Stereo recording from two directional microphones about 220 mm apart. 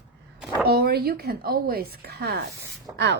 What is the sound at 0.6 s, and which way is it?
Speech, 45° right (ahead or behind).